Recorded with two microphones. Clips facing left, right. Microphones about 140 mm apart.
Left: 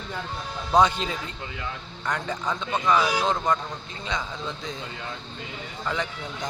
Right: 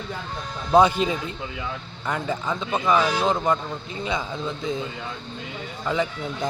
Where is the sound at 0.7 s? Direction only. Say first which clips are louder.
Right 4 dB; 10° right (ahead or behind).